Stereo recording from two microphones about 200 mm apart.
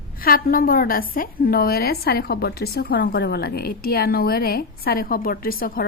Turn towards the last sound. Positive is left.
turn(degrees=45)  # may be behind; listen again after turning